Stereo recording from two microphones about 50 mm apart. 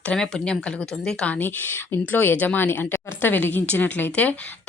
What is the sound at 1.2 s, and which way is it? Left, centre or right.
Speech, left.